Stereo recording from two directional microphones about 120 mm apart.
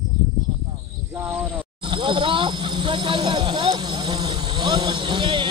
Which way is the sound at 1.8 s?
45° right (ahead or behind).